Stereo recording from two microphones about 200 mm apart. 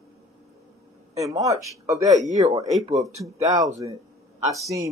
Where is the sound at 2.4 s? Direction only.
15° right (ahead or behind).